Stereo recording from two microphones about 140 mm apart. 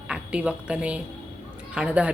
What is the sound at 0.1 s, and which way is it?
A woman's voice, 10° right (ahead or behind).